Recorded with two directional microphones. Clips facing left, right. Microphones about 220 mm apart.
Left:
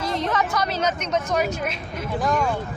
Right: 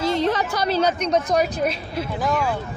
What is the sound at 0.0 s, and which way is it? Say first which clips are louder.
A woman's voice: right 3 dB; 30° right (ahead or behind).